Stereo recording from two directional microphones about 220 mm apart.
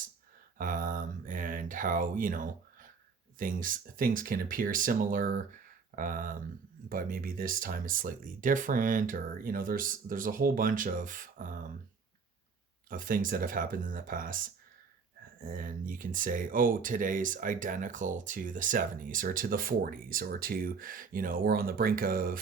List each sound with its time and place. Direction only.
0.6 s speech: 40° right (ahead or behind)
12.9 s speech: 40° right (ahead or behind)